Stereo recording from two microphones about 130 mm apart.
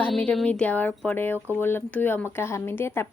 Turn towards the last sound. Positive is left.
turn(degrees=20)  # may be behind; listen again after turning